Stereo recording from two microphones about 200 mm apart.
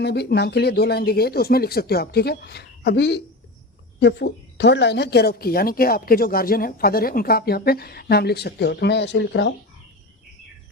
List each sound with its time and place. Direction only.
0.0 s a woman's voice: 55° left (ahead or behind)